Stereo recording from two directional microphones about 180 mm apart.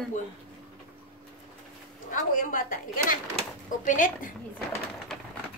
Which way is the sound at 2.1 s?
45° left (ahead or behind).